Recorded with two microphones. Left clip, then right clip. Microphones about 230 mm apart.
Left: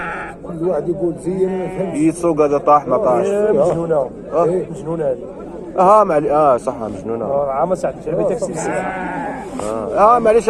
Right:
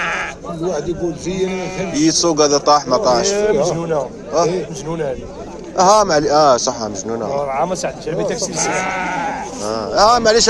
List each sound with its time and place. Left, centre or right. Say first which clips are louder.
0.0 s sheep: right 4 dB; right
1.9 s speech: right 2 dB; right
2.9 s a man's voice: even; right
3.2 s a man's voice: left 1 dB; right
6.1 s a man's voice: right 1 dB; right
7.3 s speech: left 2 dB; right
9.6 s a sound: left 1 dB; right